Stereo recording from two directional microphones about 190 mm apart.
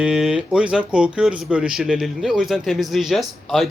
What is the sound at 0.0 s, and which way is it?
A man's voice, 5° right (ahead or behind).